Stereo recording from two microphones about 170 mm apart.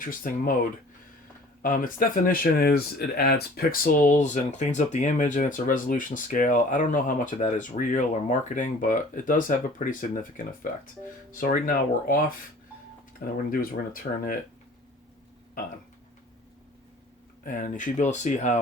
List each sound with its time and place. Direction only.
0.0 s speech: 55° left (ahead or behind)
1.6 s speech: 55° left (ahead or behind)
17.4 s speech: 50° left (ahead or behind)